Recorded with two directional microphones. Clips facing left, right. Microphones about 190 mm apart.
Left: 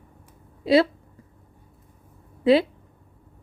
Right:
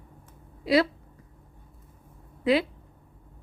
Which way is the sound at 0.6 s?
25° left (ahead or behind).